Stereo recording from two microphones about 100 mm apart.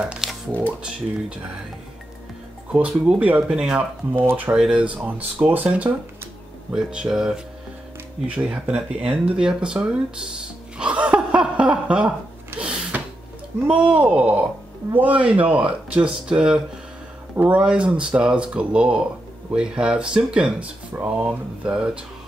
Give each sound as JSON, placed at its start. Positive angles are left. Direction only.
{"t": 0.0, "sound": "music", "side_deg": -5}
{"t": 0.7, "sound": "speech", "side_deg": -10}
{"t": 2.7, "sound": "speech", "side_deg": -10}
{"t": 10.8, "sound": "laughter", "side_deg": -10}
{"t": 12.5, "sound": "a sound", "side_deg": -10}
{"t": 13.9, "sound": "speech", "side_deg": -15}